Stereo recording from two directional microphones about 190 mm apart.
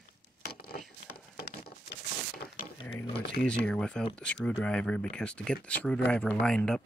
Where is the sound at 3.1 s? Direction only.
5° left (ahead or behind).